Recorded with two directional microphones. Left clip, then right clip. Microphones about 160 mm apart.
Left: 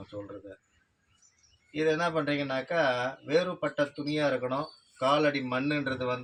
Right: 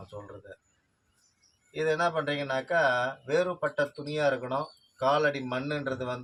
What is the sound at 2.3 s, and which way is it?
Speech, 35° right (ahead or behind).